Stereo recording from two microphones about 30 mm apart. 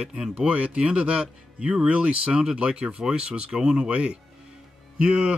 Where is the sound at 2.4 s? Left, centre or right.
Right.